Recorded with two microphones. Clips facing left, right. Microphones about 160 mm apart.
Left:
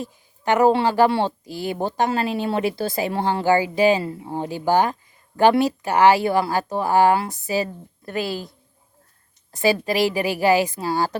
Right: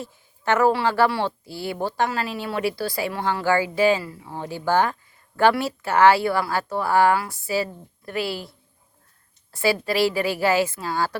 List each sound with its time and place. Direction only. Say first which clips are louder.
0.0 s speech: left 2 dB; 15° left (ahead or behind)
9.5 s a woman's voice: left 2 dB; 20° left (ahead or behind)